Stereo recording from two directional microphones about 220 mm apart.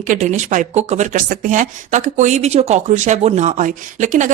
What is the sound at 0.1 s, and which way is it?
Speech, 35° right (ahead or behind).